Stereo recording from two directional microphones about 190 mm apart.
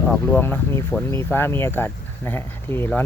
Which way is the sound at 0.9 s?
10° left (ahead or behind).